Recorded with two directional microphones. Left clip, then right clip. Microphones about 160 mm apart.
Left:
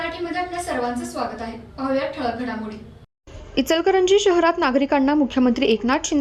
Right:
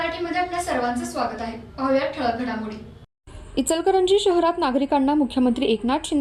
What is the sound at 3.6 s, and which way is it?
Speech, 35° left (ahead or behind).